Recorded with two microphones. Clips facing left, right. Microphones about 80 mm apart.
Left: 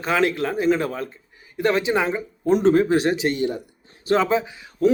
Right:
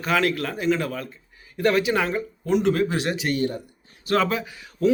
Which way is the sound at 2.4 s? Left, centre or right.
Left.